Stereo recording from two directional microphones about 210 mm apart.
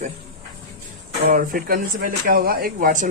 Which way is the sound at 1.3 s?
45° right (ahead or behind).